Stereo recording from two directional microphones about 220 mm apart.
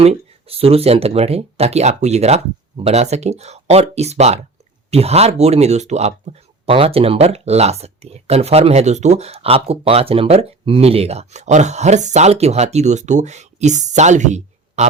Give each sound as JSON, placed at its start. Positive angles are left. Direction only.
{"t": 0.0, "sound": "speech", "side_deg": -25}